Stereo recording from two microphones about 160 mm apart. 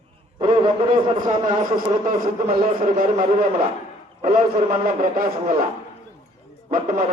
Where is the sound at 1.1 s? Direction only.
30° right (ahead or behind).